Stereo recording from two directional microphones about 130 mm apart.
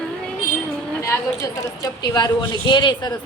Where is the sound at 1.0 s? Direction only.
20° left (ahead or behind).